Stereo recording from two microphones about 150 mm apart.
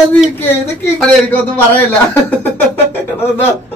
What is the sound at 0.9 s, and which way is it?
Speech, 10° left (ahead or behind).